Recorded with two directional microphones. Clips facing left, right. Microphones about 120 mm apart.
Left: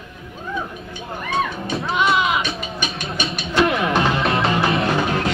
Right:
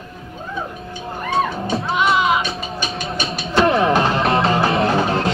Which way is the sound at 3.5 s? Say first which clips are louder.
Right 3 dB; 35° right (ahead or behind).